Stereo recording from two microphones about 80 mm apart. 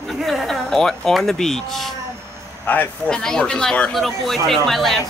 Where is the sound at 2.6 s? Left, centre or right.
Left.